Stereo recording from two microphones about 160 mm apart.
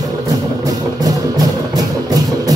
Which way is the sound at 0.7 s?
25° right (ahead or behind).